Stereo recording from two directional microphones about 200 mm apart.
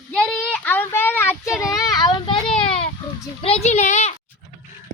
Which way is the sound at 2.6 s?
25° left (ahead or behind).